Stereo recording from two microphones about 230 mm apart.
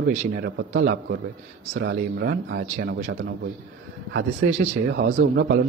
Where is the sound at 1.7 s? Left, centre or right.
Right.